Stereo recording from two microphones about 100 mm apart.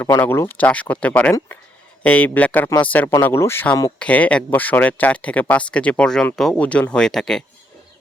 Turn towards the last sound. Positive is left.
turn(degrees=5)  # may be behind; listen again after turning